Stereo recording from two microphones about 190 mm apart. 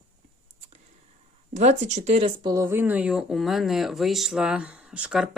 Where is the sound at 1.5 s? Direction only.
40° right (ahead or behind).